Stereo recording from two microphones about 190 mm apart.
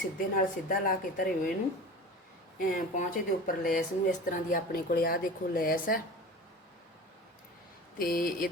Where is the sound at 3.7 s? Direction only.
45° left (ahead or behind).